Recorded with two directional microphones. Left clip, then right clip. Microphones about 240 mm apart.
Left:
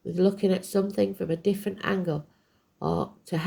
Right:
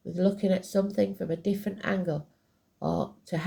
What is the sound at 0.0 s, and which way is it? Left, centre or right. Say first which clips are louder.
Speech: left 4 dB; left.